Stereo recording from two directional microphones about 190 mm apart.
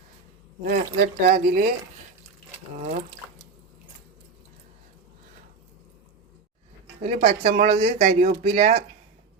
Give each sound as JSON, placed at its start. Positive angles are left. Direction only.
{"t": 0.6, "sound": "speech", "side_deg": -50}
{"t": 7.0, "sound": "speech", "side_deg": -40}